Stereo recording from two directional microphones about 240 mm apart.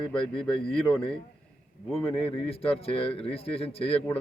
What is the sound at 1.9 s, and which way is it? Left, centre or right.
Speech, left.